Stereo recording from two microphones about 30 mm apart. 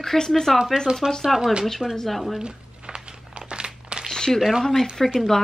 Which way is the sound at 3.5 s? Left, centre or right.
Right.